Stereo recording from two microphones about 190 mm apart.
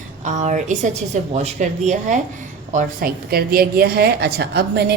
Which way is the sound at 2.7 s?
50° right (ahead or behind).